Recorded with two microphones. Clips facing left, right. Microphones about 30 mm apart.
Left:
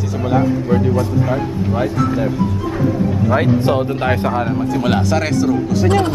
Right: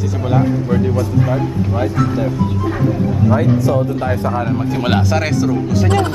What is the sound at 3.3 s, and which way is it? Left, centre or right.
Speech, left.